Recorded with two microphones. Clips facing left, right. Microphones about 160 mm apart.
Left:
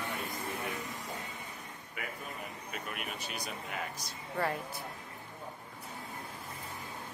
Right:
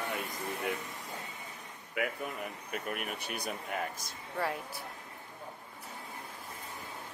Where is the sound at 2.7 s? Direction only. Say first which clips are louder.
Right 4 dB; 50° right (ahead or behind).